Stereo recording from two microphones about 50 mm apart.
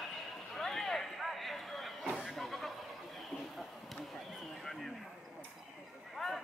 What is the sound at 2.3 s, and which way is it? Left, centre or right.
Vehicle, centre.